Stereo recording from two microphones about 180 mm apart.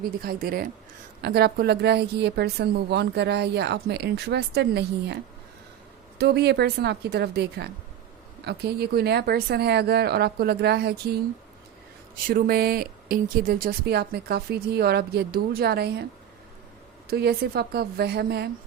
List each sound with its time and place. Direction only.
0.0 s a woman's voice: 55° right (ahead or behind)
12.3 s speech: 55° right (ahead or behind)
17.1 s speech: 60° right (ahead or behind)